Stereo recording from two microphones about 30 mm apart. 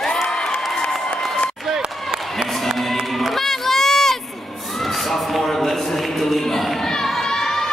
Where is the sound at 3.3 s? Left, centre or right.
Centre.